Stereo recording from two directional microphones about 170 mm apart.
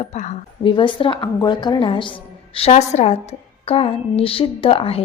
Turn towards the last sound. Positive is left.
turn(degrees=35)  # may be behind; listen again after turning